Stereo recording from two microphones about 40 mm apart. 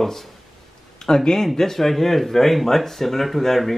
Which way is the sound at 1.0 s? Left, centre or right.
Centre.